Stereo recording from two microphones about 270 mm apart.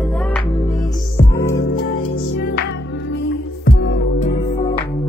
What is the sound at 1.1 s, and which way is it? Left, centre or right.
Music, centre.